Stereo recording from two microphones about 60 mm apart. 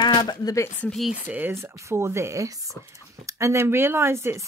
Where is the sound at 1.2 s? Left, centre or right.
Right.